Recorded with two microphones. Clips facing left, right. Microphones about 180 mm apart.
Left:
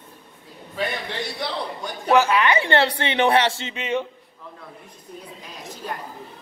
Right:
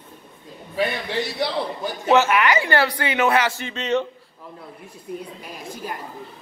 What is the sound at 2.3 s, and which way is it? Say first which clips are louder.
Speech: even; 25° left (ahead or behind).